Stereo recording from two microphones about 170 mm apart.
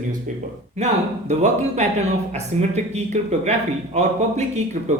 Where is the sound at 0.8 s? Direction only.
40° right (ahead or behind).